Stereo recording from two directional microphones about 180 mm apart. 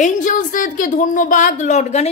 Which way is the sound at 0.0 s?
45° left (ahead or behind).